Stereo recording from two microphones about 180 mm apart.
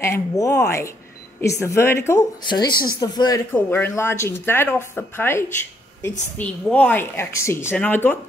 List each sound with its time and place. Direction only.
0.0 s speech: 15° left (ahead or behind)